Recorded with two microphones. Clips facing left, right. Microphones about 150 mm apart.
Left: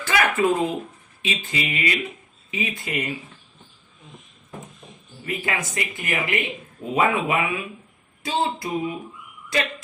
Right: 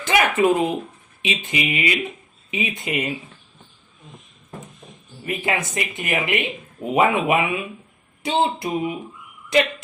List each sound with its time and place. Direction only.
0.0 s speech: 20° right (ahead or behind)
5.2 s speech: 20° right (ahead or behind)